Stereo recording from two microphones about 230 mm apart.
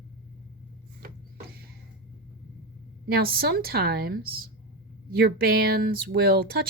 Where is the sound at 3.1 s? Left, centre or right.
Right.